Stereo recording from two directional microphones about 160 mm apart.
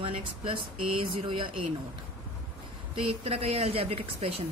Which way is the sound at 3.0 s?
35° right (ahead or behind).